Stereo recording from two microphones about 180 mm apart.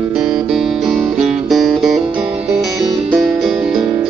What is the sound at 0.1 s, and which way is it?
Music, 5° right (ahead or behind).